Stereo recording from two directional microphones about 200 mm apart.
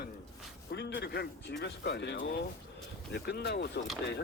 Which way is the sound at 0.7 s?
55° left (ahead or behind).